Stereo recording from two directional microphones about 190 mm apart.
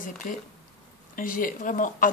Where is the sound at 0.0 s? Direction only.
45° left (ahead or behind).